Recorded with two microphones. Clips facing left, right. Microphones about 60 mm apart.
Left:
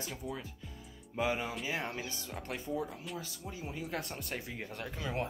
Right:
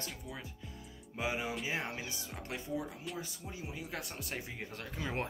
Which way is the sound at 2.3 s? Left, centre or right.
Centre.